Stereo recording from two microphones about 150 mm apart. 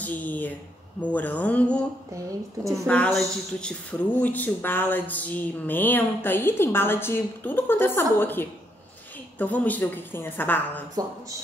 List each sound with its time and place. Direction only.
0.0 s speech: 10° left (ahead or behind)
2.6 s a woman's voice: 20° right (ahead or behind)
2.9 s speech: 5° left (ahead or behind)